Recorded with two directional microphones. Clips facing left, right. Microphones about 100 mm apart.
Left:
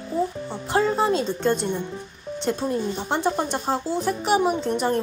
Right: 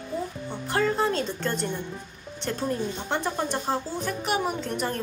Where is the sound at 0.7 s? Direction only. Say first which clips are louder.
Left 4 dB; 20° left (ahead or behind).